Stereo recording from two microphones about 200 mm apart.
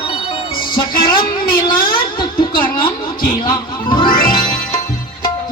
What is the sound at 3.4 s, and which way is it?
Speech, 25° left (ahead or behind).